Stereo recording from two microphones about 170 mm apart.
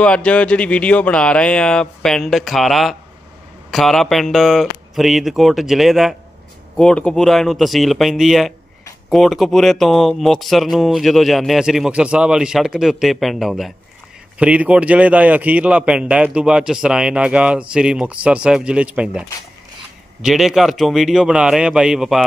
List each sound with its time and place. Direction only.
0.0 s a man's voice: 5° left (ahead or behind)